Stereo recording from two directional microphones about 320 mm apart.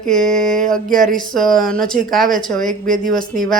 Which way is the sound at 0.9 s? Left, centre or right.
Right.